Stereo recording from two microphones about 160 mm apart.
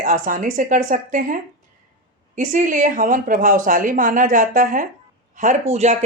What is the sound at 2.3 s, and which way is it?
Speech, 55° right (ahead or behind).